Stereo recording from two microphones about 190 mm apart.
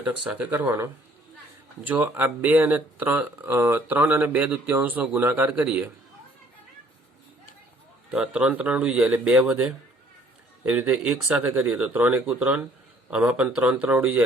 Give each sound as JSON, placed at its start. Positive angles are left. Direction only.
{"t": 0.0, "sound": "speech", "side_deg": -5}
{"t": 8.1, "sound": "speech", "side_deg": -5}